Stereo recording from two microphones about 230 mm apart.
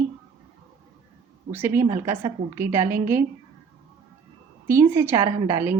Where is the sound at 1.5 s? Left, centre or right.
Centre.